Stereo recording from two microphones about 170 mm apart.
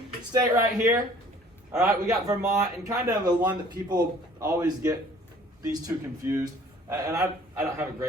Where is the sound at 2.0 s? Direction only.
20° right (ahead or behind).